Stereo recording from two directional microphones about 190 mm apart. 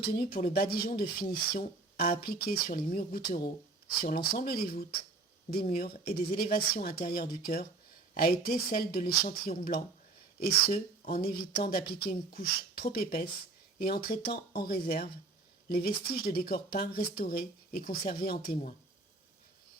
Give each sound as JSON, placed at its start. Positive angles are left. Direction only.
{"t": 0.0, "sound": "speech", "side_deg": 55}